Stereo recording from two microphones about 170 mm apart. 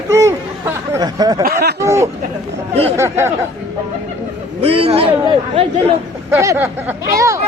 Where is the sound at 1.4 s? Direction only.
60° right (ahead or behind).